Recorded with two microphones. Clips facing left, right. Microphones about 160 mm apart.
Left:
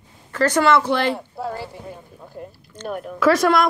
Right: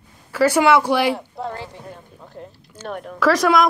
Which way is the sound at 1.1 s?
5° left (ahead or behind).